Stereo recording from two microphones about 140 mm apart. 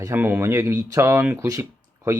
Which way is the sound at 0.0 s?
15° right (ahead or behind).